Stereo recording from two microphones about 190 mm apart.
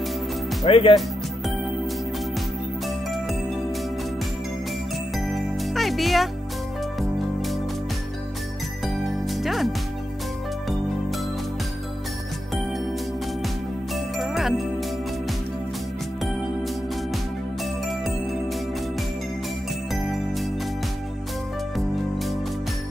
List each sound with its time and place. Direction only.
0.7 s speech: 30° left (ahead or behind)
5.1 s music: centre (ahead or behind)
8.8 s music: centre (ahead or behind)
13.9 s music: centre (ahead or behind)
19.9 s music: centre (ahead or behind)
21.7 s music: centre (ahead or behind)